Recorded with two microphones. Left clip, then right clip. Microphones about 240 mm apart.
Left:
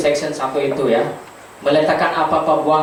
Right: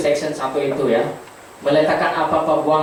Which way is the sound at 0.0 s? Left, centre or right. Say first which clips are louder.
Left 1 dB; centre.